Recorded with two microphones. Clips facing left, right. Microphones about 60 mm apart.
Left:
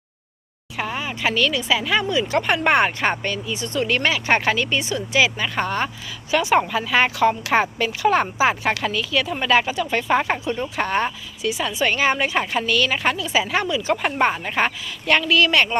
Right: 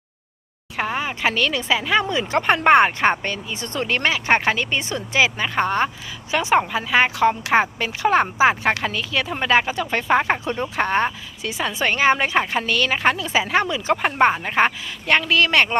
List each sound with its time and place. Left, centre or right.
0.8 s speech: right
10.0 s speech: right